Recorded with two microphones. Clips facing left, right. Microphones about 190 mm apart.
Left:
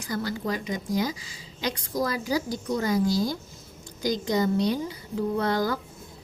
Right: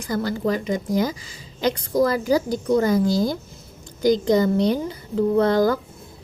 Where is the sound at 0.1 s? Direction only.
50° right (ahead or behind).